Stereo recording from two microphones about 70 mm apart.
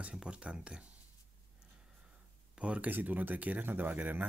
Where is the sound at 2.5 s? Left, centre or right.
Centre.